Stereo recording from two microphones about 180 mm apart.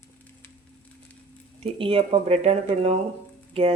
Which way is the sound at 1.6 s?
30° right (ahead or behind).